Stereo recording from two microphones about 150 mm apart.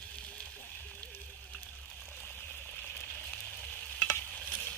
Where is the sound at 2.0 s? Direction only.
10° left (ahead or behind).